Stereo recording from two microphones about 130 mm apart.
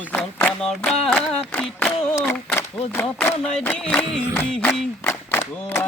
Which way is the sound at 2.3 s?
20° left (ahead or behind).